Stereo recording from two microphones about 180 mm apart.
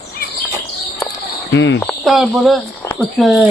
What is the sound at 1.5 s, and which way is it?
Speech, 85° left.